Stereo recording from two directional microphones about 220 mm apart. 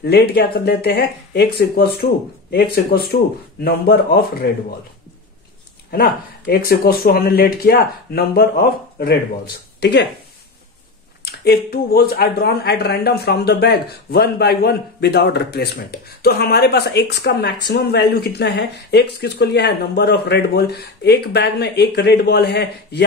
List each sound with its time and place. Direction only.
0.0 s speech: 45° left (ahead or behind)
5.9 s speech: 45° left (ahead or behind)
11.4 s speech: 45° left (ahead or behind)